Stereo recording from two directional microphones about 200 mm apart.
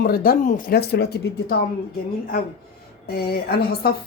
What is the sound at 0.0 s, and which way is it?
Speech, 45° left (ahead or behind).